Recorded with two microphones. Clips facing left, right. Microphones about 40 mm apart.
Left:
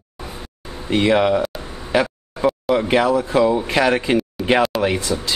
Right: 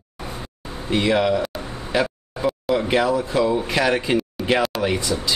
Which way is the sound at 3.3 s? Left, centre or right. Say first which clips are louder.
Left 4 dB; left.